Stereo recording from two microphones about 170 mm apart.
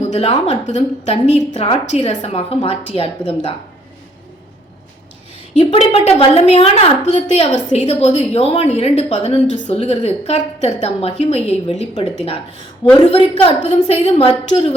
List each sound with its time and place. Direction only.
0.0 s a woman's voice: 40° left (ahead or behind)
5.9 s a woman's voice: 35° left (ahead or behind)